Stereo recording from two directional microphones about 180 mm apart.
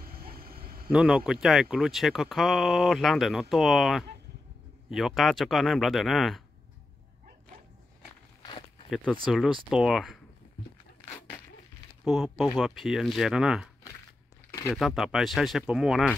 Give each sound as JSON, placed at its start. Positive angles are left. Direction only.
{"t": 0.0, "sound": "a sound", "side_deg": -55}
{"t": 0.8, "sound": "speech", "side_deg": -5}
{"t": 8.9, "sound": "speech", "side_deg": 5}
{"t": 12.0, "sound": "speech", "side_deg": 0}
{"t": 14.5, "sound": "a sound", "side_deg": 15}
{"t": 14.8, "sound": "speech", "side_deg": 0}